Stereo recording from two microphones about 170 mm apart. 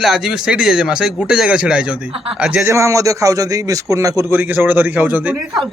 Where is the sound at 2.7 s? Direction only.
15° right (ahead or behind).